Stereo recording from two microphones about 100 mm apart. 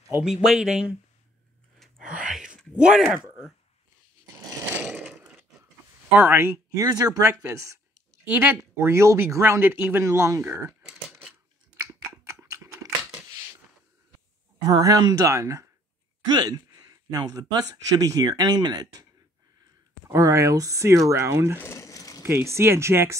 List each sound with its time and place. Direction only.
0.2 s speech: 5° right (ahead or behind)
1.8 s gasp: 5° right (ahead or behind)
4.9 s a sound: 20° right (ahead or behind)
6.0 s speech: 20° right (ahead or behind)
6.8 s speech: 40° right (ahead or behind)
8.3 s speech: 20° right (ahead or behind)
10.8 s a sound: 5° right (ahead or behind)
11.7 s scissors: 30° right (ahead or behind)
12.4 s typing: 35° right (ahead or behind)
14.6 s speech: 40° right (ahead or behind)
20.1 s speech: 30° right (ahead or behind)
21.5 s a sound: 30° left (ahead or behind)
22.2 s speech: 25° right (ahead or behind)